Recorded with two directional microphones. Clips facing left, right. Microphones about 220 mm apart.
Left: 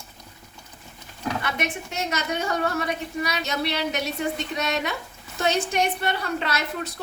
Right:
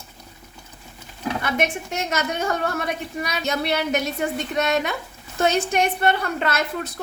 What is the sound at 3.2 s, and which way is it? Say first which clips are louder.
A woman's voice: right 3 dB; 50° right (ahead or behind).